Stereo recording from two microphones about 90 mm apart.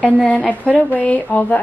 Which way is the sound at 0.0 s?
15° left (ahead or behind).